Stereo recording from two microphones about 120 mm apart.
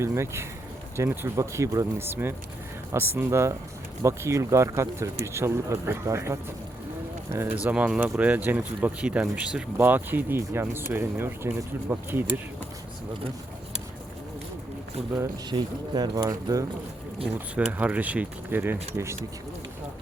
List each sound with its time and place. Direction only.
0.0 s speech: 20° right (ahead or behind)
15.4 s speech: 35° right (ahead or behind)
17.2 s speech: 15° right (ahead or behind)